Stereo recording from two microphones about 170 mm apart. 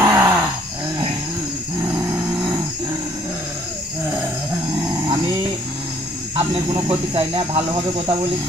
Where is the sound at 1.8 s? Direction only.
15° right (ahead or behind).